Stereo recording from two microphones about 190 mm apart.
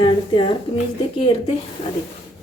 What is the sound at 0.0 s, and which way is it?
Speech, 25° left (ahead or behind).